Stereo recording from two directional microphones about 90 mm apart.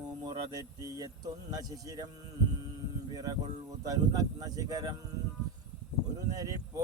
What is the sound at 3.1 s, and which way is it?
Speech, 45° right (ahead or behind).